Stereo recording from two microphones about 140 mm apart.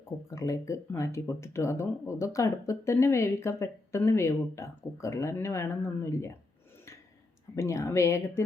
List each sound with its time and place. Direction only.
0.3 s speech: 20° left (ahead or behind)
7.5 s speech: 20° left (ahead or behind)